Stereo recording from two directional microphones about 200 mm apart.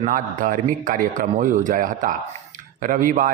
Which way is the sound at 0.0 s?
40° right (ahead or behind).